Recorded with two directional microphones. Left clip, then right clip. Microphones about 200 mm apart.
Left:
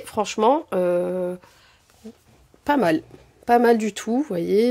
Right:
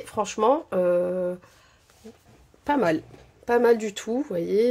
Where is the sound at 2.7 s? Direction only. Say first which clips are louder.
Left 3 dB; 30° left (ahead or behind).